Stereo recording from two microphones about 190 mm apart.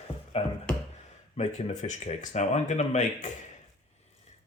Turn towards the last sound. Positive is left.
turn(degrees=40)  # may be behind; listen again after turning